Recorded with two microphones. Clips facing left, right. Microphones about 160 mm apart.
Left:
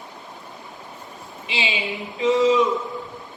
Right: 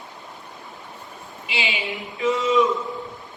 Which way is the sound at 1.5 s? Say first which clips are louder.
Left 1 dB; 20° left (ahead or behind).